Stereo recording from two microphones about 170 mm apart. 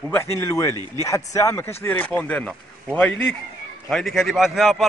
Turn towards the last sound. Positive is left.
turn(degrees=0)  # may be behind; listen again after turning